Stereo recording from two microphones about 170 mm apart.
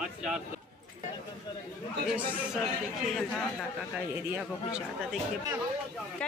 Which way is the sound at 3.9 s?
5° right (ahead or behind).